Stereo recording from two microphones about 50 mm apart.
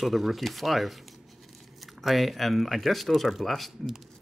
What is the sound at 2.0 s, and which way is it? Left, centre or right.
Speech, centre.